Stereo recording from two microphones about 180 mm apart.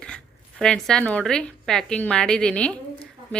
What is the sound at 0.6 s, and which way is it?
Speech, 5° left (ahead or behind).